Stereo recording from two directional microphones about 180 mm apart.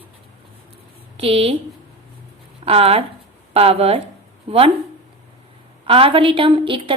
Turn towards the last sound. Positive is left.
turn(degrees=-30)  # may be behind; listen again after turning